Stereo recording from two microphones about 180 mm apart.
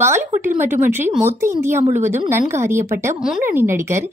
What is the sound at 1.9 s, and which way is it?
Speech, 45° right (ahead or behind).